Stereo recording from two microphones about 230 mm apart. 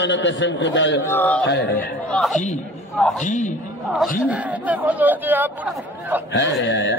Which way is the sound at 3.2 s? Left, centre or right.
Left.